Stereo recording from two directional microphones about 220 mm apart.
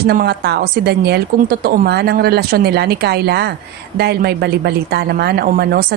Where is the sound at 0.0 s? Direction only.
45° right (ahead or behind).